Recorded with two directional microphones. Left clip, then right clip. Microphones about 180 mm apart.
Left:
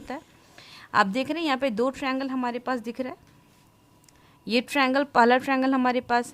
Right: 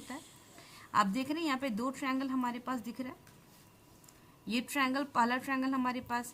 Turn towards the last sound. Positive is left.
turn(degrees=60)  # may be behind; listen again after turning